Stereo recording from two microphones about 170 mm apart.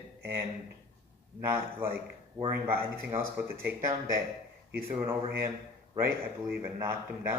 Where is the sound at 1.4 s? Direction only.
15° right (ahead or behind).